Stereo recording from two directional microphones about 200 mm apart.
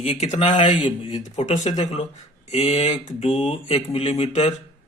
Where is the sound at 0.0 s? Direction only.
35° left (ahead or behind).